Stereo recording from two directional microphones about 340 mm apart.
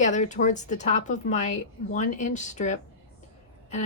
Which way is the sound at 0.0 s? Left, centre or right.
Left.